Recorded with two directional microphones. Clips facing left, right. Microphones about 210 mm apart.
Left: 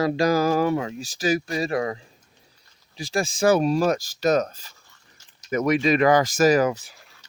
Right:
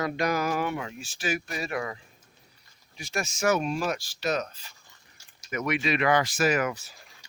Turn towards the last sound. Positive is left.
turn(degrees=-10)  # may be behind; listen again after turning